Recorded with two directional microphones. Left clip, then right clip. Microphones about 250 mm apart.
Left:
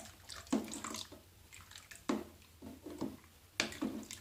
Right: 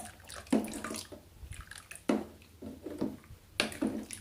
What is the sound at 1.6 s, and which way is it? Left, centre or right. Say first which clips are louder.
Drip: right 6 dB; centre.